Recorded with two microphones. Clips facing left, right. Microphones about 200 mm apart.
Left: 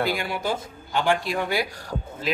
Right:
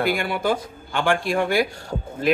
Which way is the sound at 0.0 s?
55° right (ahead or behind).